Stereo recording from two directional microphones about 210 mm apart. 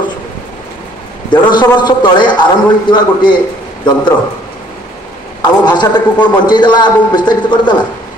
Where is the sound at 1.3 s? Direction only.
20° left (ahead or behind).